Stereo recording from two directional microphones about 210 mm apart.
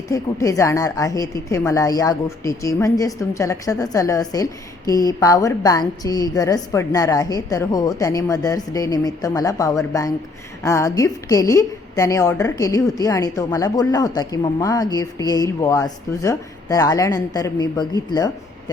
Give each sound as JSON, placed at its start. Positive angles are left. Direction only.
{"t": 0.1, "sound": "a woman's voice", "side_deg": 15}